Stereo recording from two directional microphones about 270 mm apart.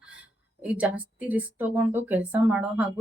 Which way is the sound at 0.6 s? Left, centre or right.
Centre.